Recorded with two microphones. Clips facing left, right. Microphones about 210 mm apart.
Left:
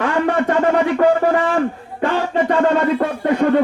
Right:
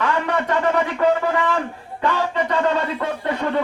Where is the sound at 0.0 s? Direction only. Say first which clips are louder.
Left 5 dB; 50° left (ahead or behind).